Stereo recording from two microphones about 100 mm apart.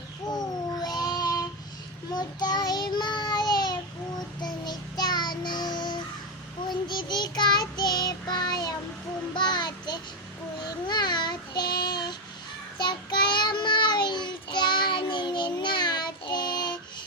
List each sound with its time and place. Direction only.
0.3 s babbling: 40° left (ahead or behind)
2.1 s child singing: 45° left (ahead or behind)
9.3 s a sound: 50° left (ahead or behind)
10.6 s child singing: 45° left (ahead or behind)